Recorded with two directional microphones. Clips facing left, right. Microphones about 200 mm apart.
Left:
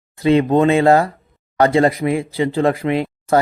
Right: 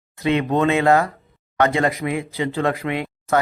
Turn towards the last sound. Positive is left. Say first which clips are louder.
# left 5 dB
turn(degrees=35)  # may be behind; listen again after turning